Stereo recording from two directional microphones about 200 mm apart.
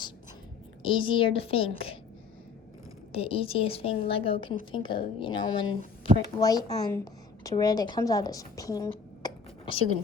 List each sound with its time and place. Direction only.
0.8 s a woman's voice: 25° left (ahead or behind)
3.1 s a woman's voice: 30° left (ahead or behind)